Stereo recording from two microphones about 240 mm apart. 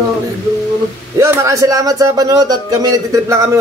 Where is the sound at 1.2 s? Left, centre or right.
Centre.